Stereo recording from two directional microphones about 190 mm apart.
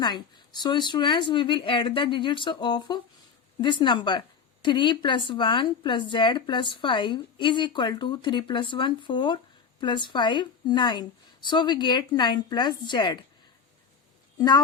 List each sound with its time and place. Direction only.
0.0 s speech: 20° left (ahead or behind)
14.3 s a woman's voice: 20° left (ahead or behind)